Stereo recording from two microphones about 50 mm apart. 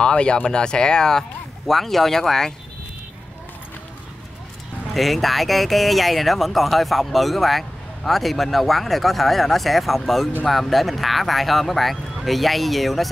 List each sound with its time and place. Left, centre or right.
0.0 s speech: centre
4.9 s speech: centre